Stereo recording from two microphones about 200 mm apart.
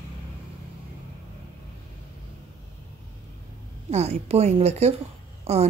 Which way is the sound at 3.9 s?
35° right (ahead or behind).